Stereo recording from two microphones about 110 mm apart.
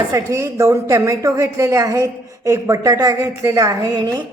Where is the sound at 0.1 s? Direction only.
25° right (ahead or behind).